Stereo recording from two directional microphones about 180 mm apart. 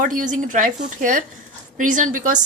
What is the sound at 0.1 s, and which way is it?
A woman's voice, 50° right (ahead or behind).